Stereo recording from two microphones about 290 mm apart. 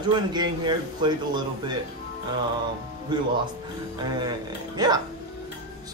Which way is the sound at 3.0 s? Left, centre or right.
Centre.